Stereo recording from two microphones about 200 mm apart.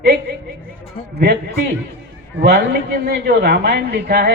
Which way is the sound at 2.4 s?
50° right (ahead or behind).